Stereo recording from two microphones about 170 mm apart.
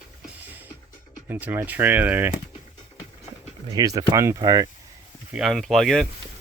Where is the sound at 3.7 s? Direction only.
20° right (ahead or behind).